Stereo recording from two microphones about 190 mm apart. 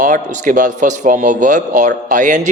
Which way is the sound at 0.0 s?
45° right (ahead or behind).